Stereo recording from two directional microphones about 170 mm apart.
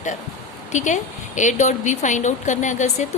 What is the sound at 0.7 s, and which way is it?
A woman's voice, 45° left (ahead or behind).